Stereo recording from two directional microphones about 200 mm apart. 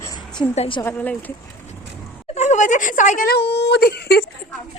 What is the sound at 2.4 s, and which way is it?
A woman's voice, 35° left (ahead or behind).